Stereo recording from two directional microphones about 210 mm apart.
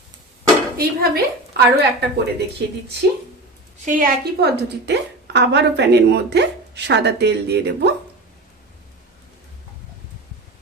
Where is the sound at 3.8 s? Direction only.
40° right (ahead or behind).